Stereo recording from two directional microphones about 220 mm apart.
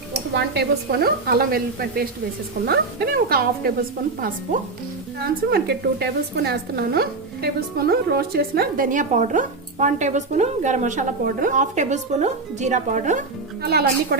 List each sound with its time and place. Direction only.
0.3 s speech: 45° right (ahead or behind)
5.5 s speech: 45° right (ahead or behind)